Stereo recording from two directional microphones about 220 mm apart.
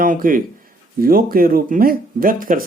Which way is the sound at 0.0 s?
40° right (ahead or behind).